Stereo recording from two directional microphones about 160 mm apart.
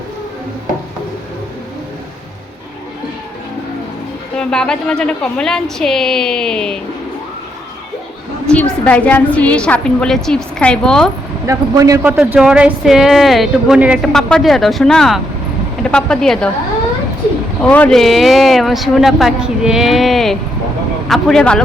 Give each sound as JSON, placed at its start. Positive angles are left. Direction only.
{"t": 4.4, "sound": "speech", "side_deg": 5}
{"t": 8.4, "sound": "a woman's voice", "side_deg": 5}
{"t": 11.4, "sound": "speech", "side_deg": -20}
{"t": 12.0, "sound": "speech", "side_deg": -10}
{"t": 17.6, "sound": "speech", "side_deg": 5}